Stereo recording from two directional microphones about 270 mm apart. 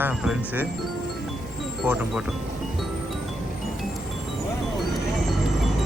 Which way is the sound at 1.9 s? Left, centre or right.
Centre.